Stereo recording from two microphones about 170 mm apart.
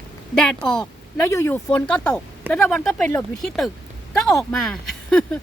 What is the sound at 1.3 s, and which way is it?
Speech, 15° left (ahead or behind).